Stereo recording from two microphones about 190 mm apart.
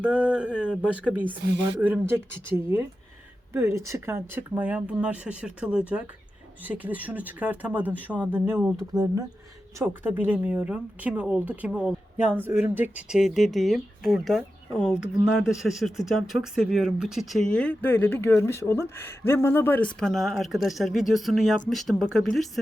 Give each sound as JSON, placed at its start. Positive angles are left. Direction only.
{"t": 0.0, "sound": "speech", "side_deg": -5}
{"t": 3.5, "sound": "speech", "side_deg": -15}